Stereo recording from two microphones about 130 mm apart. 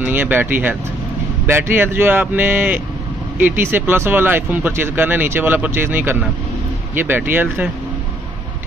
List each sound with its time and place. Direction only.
0.0 s speech: 15° right (ahead or behind)